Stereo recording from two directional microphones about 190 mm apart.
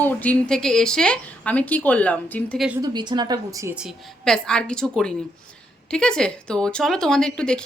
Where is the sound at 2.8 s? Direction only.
20° right (ahead or behind).